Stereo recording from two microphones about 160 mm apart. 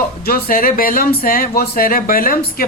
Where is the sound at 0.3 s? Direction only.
70° left (ahead or behind).